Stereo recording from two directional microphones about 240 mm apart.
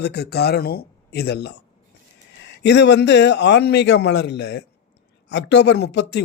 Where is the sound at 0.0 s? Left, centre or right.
Left.